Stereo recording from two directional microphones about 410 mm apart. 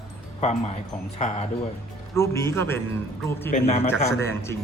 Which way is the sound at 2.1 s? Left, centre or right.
Centre.